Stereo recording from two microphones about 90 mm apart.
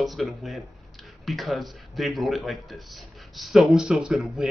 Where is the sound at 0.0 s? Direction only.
Centre (ahead or behind).